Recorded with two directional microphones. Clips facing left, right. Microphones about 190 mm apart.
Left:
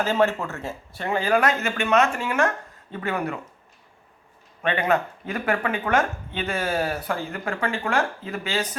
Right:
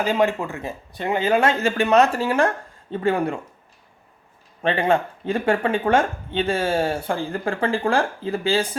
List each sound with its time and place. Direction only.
0.0 s speech: 15° right (ahead or behind); by 3.4 s 30° right (ahead or behind)
4.6 s speech: 30° right (ahead or behind)